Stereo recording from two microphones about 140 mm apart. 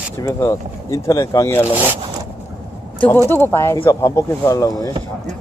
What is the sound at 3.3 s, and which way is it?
Speech, 15° left (ahead or behind).